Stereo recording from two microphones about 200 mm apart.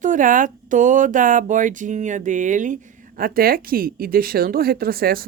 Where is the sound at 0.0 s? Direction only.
40° right (ahead or behind).